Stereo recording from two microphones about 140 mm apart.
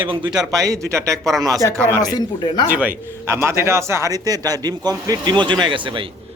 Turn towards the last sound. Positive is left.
turn(degrees=-35)  # may be behind; listen again after turning